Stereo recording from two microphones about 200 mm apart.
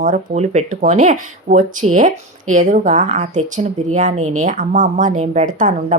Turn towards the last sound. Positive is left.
turn(degrees=-40)  # may be behind; listen again after turning